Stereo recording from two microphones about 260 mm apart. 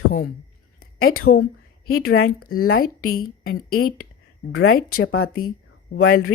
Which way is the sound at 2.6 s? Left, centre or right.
Left.